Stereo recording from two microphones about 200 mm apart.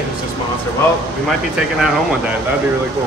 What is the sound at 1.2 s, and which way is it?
Speech, 5° right (ahead or behind).